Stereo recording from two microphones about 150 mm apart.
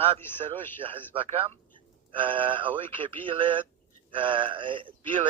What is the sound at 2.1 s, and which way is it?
Speech, 35° right (ahead or behind).